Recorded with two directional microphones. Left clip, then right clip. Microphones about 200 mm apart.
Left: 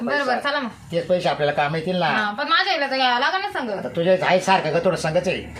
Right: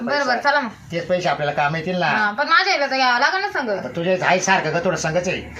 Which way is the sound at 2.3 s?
5° left (ahead or behind).